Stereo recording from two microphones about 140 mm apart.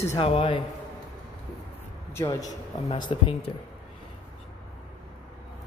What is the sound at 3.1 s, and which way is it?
Speech, 35° left (ahead or behind).